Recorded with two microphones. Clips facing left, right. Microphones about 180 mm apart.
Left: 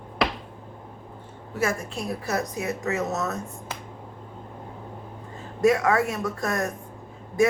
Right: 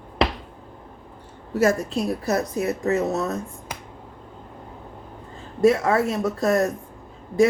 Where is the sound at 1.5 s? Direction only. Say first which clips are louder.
Right 7 dB; 40° right (ahead or behind).